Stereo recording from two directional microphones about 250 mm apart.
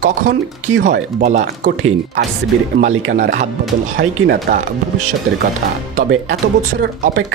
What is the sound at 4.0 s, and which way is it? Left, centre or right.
Speech, right.